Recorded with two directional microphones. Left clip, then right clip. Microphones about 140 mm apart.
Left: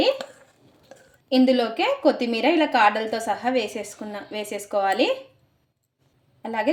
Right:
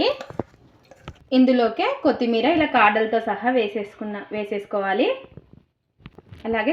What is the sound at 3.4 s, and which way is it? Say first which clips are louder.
Speech: right 3 dB; 30° right (ahead or behind).